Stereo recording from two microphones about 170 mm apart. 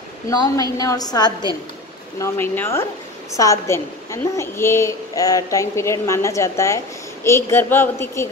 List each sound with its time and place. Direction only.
0.3 s a woman's voice: 20° left (ahead or behind)